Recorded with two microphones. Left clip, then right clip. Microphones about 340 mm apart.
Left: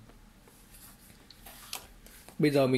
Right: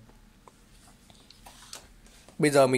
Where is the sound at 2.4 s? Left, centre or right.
Centre.